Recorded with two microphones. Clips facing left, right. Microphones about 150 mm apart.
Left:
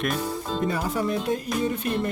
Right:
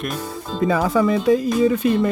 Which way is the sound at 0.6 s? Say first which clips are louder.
Right 10 dB; 90° right.